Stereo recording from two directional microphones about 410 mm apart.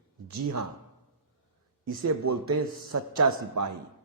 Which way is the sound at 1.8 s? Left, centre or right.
Right.